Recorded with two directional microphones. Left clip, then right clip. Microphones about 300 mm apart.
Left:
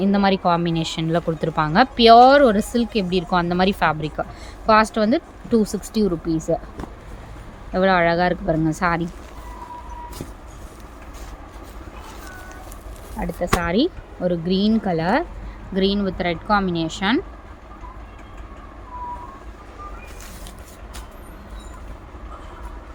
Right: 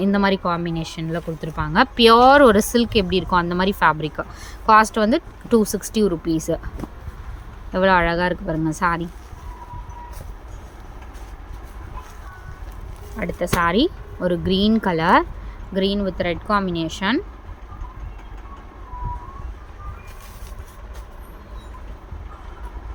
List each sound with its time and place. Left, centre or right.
0.0 s speech: centre
7.7 s speech: centre
13.1 s speech: centre